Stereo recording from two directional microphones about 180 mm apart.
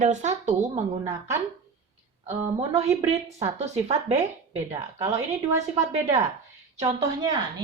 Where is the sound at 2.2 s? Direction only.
35° right (ahead or behind).